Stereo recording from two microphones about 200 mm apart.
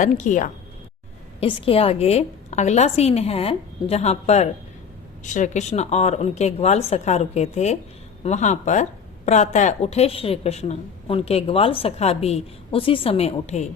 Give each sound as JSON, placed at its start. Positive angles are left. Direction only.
{"t": 0.0, "sound": "speech", "side_deg": 40}
{"t": 1.4, "sound": "speech", "side_deg": 25}